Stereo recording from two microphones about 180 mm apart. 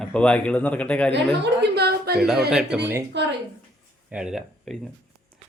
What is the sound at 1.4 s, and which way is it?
Speech, 65° right (ahead or behind).